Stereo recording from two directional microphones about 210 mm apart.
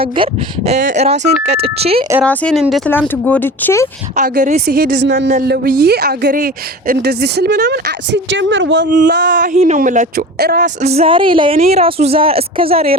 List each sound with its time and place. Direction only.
0.0 s a woman's voice: 25° right (ahead or behind)
2.2 s speech: 5° left (ahead or behind)
4.2 s speech: 40° right (ahead or behind)
4.6 s a woman's voice: 50° right (ahead or behind)
9.2 s speech: 40° right (ahead or behind)
10.8 s a woman's voice: 30° right (ahead or behind)